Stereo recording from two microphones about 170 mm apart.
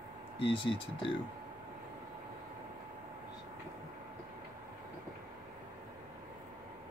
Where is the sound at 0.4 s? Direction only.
30° left (ahead or behind).